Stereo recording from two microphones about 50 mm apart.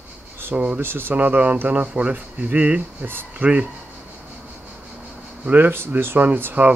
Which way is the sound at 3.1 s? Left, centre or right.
Right.